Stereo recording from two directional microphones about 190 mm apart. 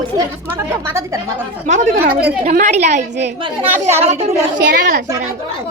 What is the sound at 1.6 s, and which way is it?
A woman's voice, 40° right (ahead or behind).